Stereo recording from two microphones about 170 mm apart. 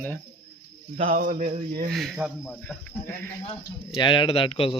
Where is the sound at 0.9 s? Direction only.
50° right (ahead or behind).